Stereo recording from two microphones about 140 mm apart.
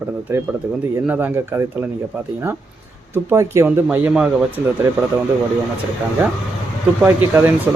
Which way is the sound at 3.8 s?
10° right (ahead or behind).